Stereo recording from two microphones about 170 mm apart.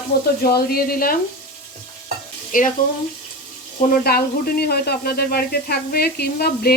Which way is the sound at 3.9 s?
60° left (ahead or behind).